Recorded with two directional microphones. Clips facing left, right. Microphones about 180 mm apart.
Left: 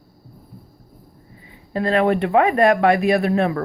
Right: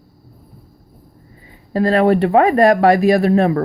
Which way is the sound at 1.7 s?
40° right (ahead or behind).